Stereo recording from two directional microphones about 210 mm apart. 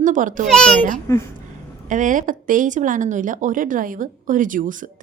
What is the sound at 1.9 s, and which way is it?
Speech, 40° right (ahead or behind).